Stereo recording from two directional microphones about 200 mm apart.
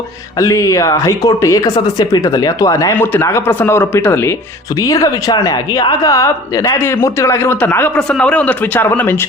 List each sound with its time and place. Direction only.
0.3 s speech: 15° left (ahead or behind)